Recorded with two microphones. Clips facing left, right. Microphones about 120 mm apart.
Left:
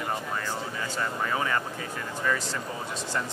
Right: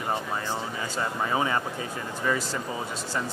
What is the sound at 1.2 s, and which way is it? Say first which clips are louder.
Speech: right 3 dB; 20° right (ahead or behind).